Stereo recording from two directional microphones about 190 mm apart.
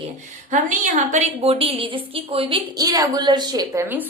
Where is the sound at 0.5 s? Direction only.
35° right (ahead or behind).